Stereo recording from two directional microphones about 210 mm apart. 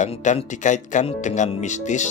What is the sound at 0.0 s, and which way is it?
Speech, 35° left (ahead or behind).